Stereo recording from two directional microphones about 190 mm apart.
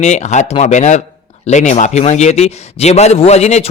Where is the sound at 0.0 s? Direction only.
35° left (ahead or behind).